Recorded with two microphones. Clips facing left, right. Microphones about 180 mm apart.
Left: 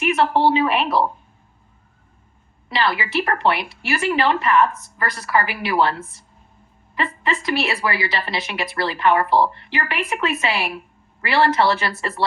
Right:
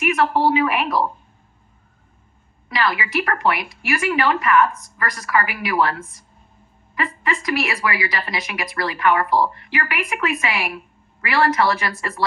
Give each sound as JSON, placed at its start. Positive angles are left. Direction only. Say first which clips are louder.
{"t": 0.0, "sound": "a woman's voice", "louder": "left 1 dB", "side_deg": 30}
{"t": 2.6, "sound": "a woman's voice", "louder": "left 1 dB", "side_deg": 30}